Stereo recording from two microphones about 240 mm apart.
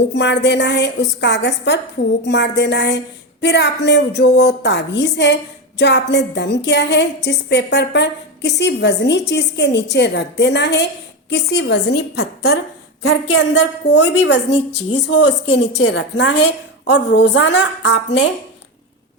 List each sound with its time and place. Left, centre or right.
0.1 s a woman's voice: left